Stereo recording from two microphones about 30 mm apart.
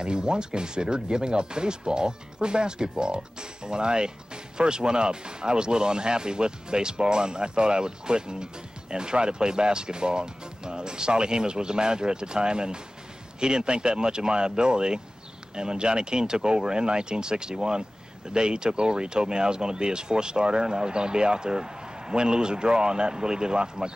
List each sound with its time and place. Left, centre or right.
0.0 s speech: right